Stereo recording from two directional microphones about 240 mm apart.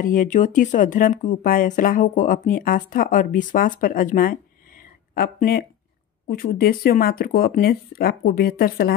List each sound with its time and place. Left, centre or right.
0.0 s speech: left